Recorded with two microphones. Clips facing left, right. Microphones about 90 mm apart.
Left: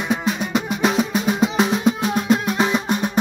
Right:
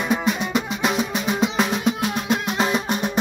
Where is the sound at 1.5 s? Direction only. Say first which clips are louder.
Left 3 dB; 30° left (ahead or behind).